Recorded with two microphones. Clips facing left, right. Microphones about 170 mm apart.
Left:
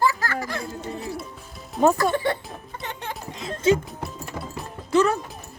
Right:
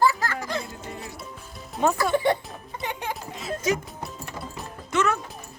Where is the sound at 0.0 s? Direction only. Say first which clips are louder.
Right 1 dB; 20° right (ahead or behind).